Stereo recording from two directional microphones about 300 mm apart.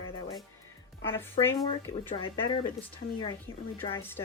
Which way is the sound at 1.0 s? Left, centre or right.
Centre.